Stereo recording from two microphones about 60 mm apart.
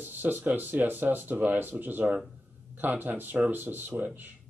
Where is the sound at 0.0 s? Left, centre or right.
Right.